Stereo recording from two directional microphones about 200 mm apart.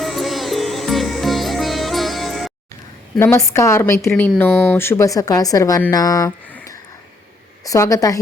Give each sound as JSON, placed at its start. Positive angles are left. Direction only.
{"t": 0.0, "sound": "music", "side_deg": 0}
{"t": 3.2, "sound": "speech", "side_deg": 10}